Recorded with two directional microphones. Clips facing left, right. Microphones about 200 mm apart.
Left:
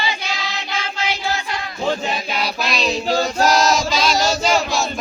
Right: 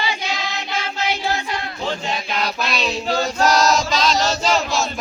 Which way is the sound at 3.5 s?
5° left (ahead or behind).